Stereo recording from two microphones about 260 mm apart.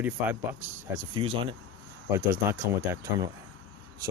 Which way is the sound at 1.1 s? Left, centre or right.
Centre.